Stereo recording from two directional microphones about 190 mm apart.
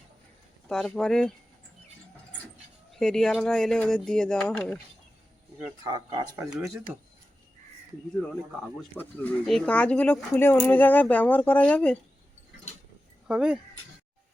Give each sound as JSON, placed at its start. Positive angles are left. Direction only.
{"t": 0.7, "sound": "speech", "side_deg": 5}
{"t": 3.0, "sound": "speech", "side_deg": 5}
{"t": 5.9, "sound": "speech", "side_deg": -20}
{"t": 8.3, "sound": "speech", "side_deg": 5}
{"t": 13.2, "sound": "speech", "side_deg": -5}